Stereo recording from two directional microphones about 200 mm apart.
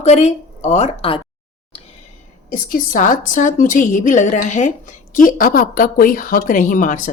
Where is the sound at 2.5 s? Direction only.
40° left (ahead or behind).